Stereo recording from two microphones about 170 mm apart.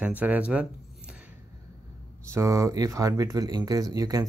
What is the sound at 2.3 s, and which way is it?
Speech, 15° right (ahead or behind).